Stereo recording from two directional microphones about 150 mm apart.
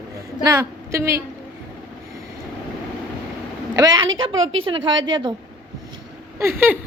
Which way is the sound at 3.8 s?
30° right (ahead or behind).